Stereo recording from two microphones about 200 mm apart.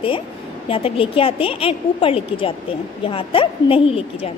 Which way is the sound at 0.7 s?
25° left (ahead or behind).